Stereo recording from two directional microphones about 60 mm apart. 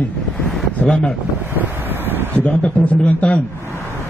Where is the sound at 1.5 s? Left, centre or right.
Right.